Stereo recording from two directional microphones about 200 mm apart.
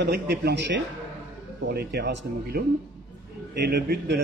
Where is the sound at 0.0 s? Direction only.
55° right (ahead or behind).